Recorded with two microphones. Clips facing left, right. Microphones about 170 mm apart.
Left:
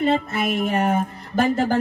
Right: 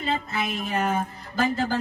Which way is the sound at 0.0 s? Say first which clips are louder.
Left 7 dB; 60° left (ahead or behind).